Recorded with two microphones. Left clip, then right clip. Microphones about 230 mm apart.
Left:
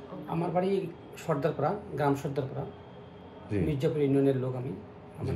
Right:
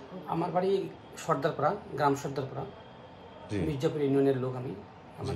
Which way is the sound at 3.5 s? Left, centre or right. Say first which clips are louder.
Left 1 dB; centre.